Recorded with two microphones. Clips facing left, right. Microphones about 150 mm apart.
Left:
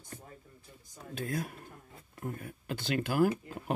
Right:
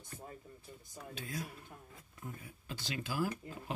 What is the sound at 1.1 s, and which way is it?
Speech, 50° left (ahead or behind).